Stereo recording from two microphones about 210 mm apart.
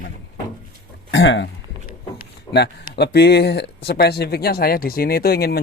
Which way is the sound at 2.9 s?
50° left (ahead or behind).